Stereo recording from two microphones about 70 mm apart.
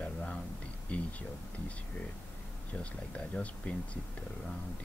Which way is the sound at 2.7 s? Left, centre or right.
Centre.